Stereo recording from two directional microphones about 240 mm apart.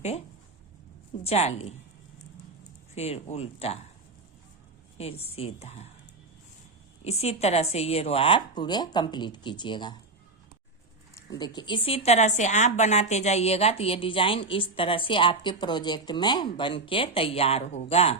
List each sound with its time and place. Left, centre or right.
1.2 s speech: left
2.9 s speech: left
4.9 s speech: left
7.0 s speech: left
11.1 s speech: centre